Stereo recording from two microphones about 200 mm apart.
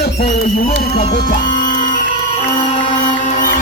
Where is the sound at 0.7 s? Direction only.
50° left (ahead or behind).